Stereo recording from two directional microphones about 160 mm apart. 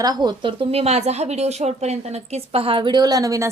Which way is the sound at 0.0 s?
25° right (ahead or behind).